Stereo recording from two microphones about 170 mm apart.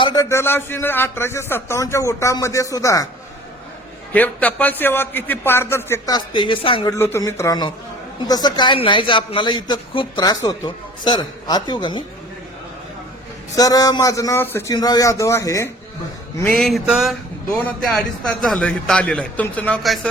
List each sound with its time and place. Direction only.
0.0 s a man's voice: 20° left (ahead or behind)
4.1 s a man's voice: 10° left (ahead or behind); by 6.9 s 30° left (ahead or behind)
6.9 s a man's voice: 15° left (ahead or behind)
13.6 s a man's voice: 20° left (ahead or behind)
16.4 s a sound: 10° left (ahead or behind)
18.4 s a man's voice: 5° left (ahead or behind)